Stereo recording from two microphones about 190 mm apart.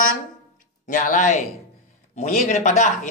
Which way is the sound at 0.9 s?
40° left (ahead or behind).